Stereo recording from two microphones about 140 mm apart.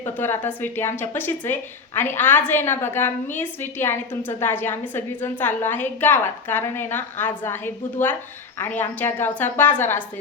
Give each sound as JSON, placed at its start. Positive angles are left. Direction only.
{"t": 0.0, "sound": "a woman's voice", "side_deg": 15}